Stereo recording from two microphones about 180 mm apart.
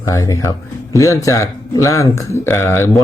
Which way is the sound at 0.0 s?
15° left (ahead or behind).